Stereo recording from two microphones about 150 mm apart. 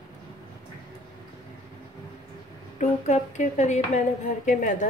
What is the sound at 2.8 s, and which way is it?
A woman's voice, 50° left (ahead or behind).